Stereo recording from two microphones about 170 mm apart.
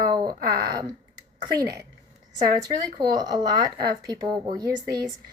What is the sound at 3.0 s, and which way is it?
Speech, 25° right (ahead or behind).